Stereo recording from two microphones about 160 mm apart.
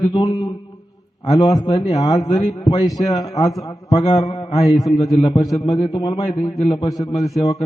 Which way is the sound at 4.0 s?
35° left (ahead or behind).